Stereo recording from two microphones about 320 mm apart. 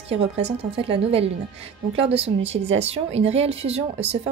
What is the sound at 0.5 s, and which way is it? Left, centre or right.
A woman's voice, centre.